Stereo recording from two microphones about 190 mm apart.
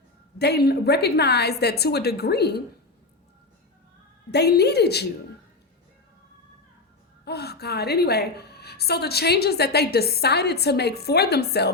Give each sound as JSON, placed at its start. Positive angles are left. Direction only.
{"t": 0.3, "sound": "a woman's voice", "side_deg": 60}
{"t": 4.3, "sound": "a woman's voice", "side_deg": 60}
{"t": 7.3, "sound": "a woman's voice", "side_deg": 60}